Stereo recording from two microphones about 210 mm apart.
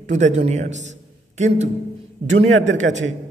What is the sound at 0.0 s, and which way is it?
Speech, 35° right (ahead or behind).